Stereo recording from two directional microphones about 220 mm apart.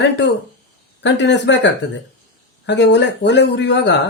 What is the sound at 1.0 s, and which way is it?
Speech, 50° left (ahead or behind).